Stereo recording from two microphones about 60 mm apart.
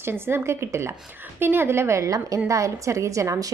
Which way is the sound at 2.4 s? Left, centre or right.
Right.